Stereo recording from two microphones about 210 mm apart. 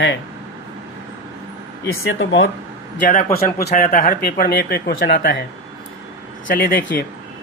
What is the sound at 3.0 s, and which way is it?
Speech, 40° left (ahead or behind).